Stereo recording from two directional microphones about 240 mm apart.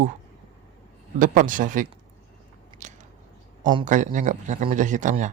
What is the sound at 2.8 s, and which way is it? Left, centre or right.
Biting, right.